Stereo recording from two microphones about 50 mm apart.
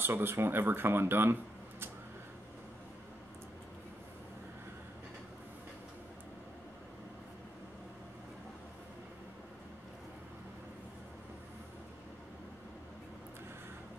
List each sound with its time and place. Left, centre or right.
0.0 s speech: right